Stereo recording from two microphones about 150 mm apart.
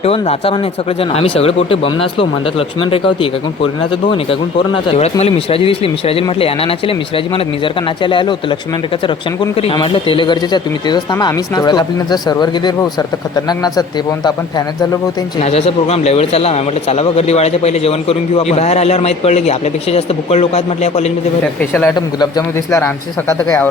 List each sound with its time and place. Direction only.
0.0 s speech: 40° left (ahead or behind)
4.9 s speech: 40° left (ahead or behind)
9.7 s speech: 35° left (ahead or behind)
15.4 s speech: 40° left (ahead or behind)
21.6 s a man's voice: 10° left (ahead or behind)
21.9 s speech: 25° left (ahead or behind)